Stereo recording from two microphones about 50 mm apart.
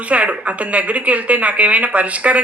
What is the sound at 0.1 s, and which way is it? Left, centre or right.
A woman's voice, right.